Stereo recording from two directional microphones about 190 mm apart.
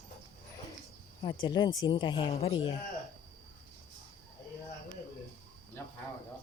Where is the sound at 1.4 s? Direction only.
25° left (ahead or behind).